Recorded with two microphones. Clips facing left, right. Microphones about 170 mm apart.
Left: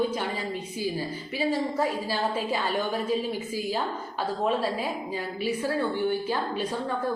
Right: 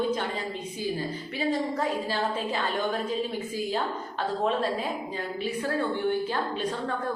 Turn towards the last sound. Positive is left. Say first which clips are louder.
# left 1 dB
turn(degrees=5)  # may be behind; listen again after turning